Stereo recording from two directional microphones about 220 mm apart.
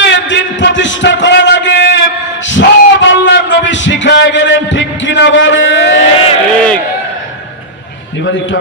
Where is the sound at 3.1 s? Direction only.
55° left (ahead or behind).